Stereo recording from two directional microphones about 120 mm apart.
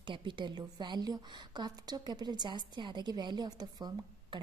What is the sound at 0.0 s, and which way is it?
A woman's voice, 40° right (ahead or behind).